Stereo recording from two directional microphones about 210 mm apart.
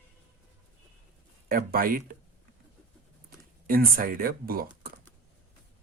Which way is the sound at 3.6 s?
45° right (ahead or behind).